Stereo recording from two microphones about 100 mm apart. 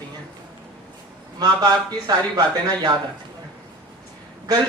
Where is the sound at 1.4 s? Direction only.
40° right (ahead or behind).